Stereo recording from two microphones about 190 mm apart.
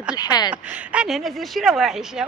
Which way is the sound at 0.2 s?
20° left (ahead or behind).